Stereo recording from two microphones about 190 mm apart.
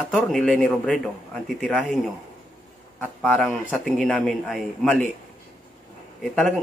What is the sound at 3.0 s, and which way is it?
A man's voice, centre (ahead or behind).